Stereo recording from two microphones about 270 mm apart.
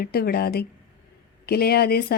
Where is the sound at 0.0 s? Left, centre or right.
Left.